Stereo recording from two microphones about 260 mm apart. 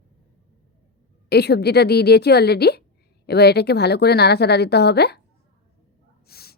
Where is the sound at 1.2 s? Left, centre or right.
Left.